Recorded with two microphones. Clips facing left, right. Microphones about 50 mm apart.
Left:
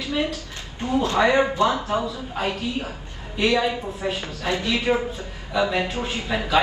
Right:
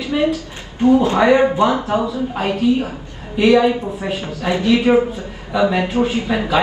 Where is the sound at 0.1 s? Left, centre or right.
Right.